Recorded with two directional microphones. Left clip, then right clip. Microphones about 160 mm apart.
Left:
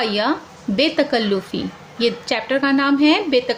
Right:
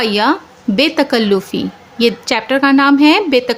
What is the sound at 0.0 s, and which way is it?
A woman's voice, 50° right (ahead or behind).